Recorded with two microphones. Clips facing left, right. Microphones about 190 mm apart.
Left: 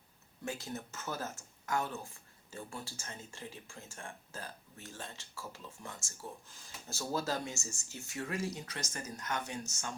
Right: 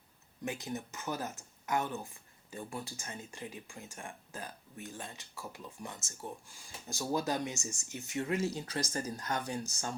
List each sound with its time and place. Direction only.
0.4 s speech: 20° right (ahead or behind); by 9.9 s 35° right (ahead or behind)